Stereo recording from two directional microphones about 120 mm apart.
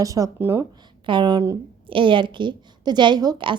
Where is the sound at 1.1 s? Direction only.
40° right (ahead or behind).